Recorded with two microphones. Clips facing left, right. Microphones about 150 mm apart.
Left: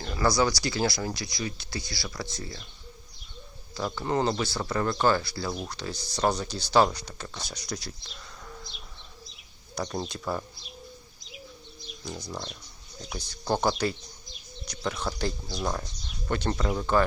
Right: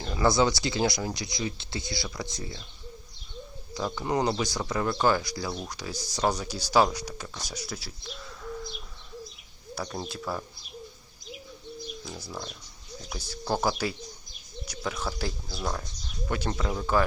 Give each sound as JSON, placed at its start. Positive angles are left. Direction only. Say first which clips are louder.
{"t": 0.1, "sound": "speech", "louder": "right 1 dB", "side_deg": -20}
{"t": 3.9, "sound": "speech", "louder": "even", "side_deg": -15}
{"t": 9.7, "sound": "speech", "louder": "left 2 dB", "side_deg": -5}
{"t": 12.0, "sound": "speech", "louder": "left 7 dB", "side_deg": -5}